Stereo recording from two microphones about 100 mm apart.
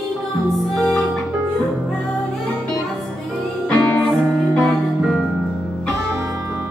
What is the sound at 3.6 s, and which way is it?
Music, 10° left (ahead or behind).